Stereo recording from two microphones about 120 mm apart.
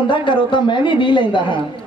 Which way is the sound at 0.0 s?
40° left (ahead or behind).